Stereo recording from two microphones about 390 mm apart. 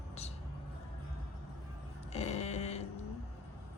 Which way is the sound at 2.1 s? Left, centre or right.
Centre.